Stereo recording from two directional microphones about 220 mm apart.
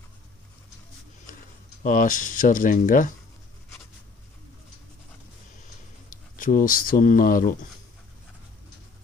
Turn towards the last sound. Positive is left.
turn(degrees=40)  # may be behind; listen again after turning